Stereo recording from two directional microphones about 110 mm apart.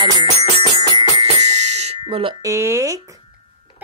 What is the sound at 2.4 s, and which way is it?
Speech, 25° right (ahead or behind).